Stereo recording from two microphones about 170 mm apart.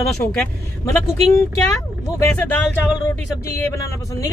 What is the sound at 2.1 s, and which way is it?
Speech, 10° left (ahead or behind).